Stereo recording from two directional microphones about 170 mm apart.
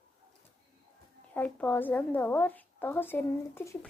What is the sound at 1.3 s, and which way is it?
A woman's voice, 10° left (ahead or behind).